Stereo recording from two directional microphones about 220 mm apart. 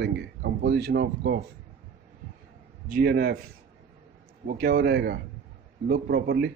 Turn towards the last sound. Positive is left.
turn(degrees=-45)  # may be behind; listen again after turning